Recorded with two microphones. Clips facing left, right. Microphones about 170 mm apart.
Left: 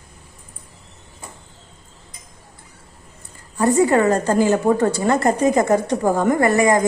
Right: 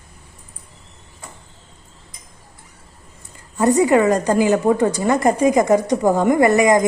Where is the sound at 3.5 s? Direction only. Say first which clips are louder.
Right 1 dB; 20° right (ahead or behind).